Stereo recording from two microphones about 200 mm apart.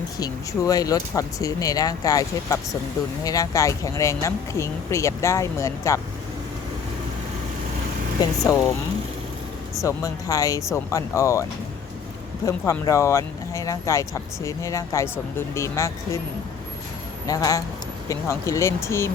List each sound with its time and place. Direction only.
0.2 s speech: 20° left (ahead or behind)
8.2 s speech: 15° left (ahead or behind)
9.8 s speech: 15° left (ahead or behind)
12.5 s speech: 15° left (ahead or behind)
17.2 s speech: 20° left (ahead or behind)